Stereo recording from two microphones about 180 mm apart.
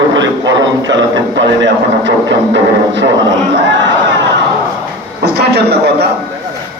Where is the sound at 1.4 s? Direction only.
80° right.